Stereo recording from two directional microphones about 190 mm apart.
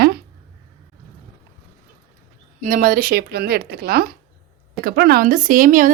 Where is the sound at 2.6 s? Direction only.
45° right (ahead or behind).